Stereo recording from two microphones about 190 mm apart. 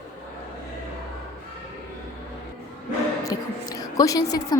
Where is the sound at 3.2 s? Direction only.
20° left (ahead or behind).